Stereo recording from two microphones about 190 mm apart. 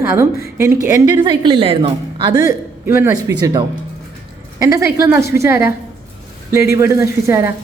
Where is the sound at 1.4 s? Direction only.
25° right (ahead or behind).